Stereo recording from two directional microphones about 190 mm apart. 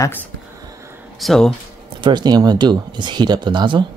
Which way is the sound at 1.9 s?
25° right (ahead or behind).